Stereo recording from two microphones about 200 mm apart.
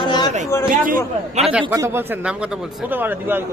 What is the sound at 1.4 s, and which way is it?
Speech, 5° right (ahead or behind).